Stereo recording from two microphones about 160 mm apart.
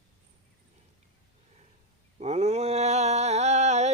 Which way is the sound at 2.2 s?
40° right (ahead or behind).